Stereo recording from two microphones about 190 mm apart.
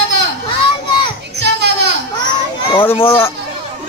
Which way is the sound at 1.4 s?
65° right (ahead or behind).